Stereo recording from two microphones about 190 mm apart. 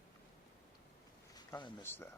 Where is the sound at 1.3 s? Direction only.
20° left (ahead or behind).